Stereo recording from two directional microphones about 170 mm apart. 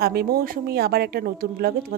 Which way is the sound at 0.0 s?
65° right (ahead or behind).